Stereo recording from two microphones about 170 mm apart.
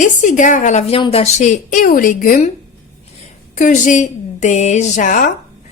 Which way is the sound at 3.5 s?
50° left (ahead or behind).